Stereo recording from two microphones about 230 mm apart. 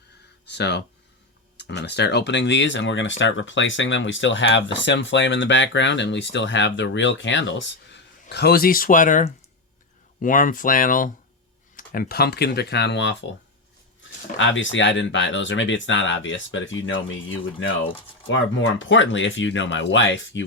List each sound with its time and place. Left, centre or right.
0.5 s speech: left
14.3 s speech: left